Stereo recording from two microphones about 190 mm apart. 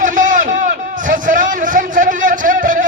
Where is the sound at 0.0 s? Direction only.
40° right (ahead or behind).